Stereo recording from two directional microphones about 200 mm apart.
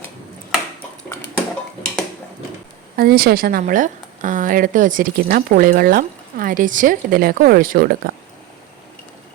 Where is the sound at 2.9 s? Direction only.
50° right (ahead or behind).